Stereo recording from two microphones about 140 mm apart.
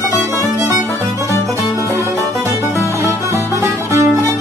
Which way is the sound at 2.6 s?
20° left (ahead or behind).